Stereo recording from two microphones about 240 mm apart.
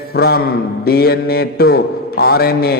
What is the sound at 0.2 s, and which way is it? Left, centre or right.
A man's voice, left.